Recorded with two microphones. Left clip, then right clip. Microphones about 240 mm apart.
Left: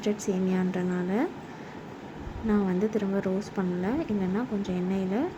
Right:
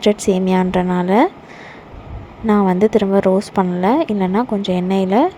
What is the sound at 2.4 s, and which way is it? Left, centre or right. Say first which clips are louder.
A woman's voice: right 13 dB; right.